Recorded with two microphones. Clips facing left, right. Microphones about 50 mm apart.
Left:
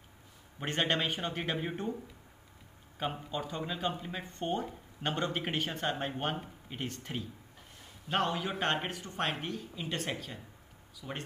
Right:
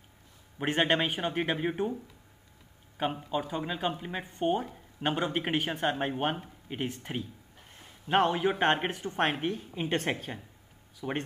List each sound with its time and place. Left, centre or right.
0.6 s speech: centre
3.0 s speech: centre
8.1 s a woman's voice: right